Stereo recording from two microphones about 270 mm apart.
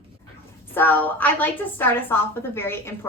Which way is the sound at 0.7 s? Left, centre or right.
Centre.